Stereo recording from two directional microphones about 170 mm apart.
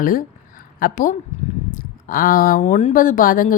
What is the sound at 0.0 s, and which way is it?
A woman's voice, 55° left (ahead or behind).